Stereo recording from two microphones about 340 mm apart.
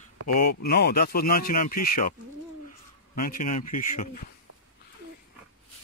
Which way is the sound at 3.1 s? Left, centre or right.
Left.